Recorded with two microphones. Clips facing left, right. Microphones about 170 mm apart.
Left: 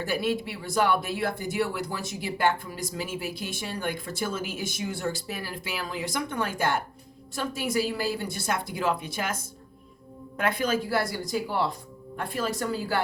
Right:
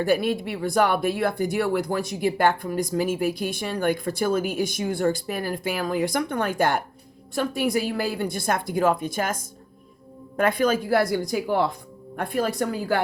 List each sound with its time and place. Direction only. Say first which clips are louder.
0.0 s speech: right 5 dB; 50° right (ahead or behind)
10.3 s speech: right 5 dB; 50° right (ahead or behind)